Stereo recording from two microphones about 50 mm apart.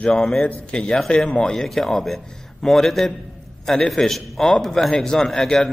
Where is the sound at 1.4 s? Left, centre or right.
Centre.